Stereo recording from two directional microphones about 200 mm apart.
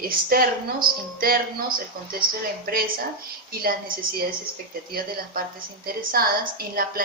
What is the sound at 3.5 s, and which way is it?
Speech, 45° right (ahead or behind).